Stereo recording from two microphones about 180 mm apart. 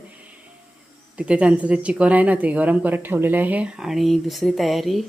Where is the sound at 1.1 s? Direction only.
5° right (ahead or behind).